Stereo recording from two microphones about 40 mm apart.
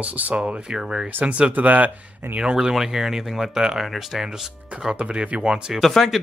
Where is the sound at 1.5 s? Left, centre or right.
Right.